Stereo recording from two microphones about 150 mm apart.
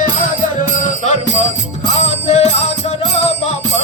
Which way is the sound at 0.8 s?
50° left (ahead or behind).